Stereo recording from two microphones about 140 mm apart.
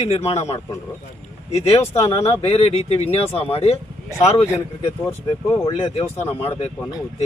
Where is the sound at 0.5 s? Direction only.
25° left (ahead or behind).